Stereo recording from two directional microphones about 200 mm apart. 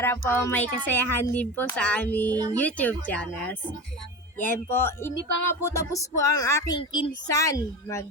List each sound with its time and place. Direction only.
0.0 s a woman's voice: 10° left (ahead or behind)
2.3 s speech: 20° right (ahead or behind)
2.6 s a woman's voice: 10° left (ahead or behind)